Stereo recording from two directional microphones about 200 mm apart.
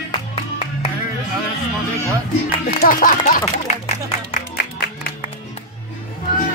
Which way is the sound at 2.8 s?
45° left (ahead or behind).